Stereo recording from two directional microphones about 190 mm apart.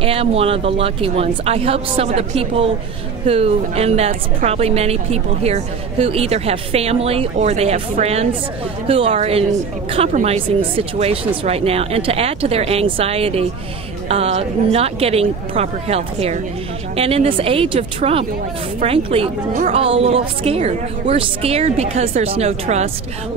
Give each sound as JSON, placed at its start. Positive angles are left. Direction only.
{"t": 0.0, "sound": "a woman's voice", "side_deg": -30}